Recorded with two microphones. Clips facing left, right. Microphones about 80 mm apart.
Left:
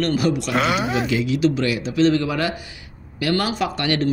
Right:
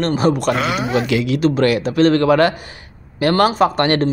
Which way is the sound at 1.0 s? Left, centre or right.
Right.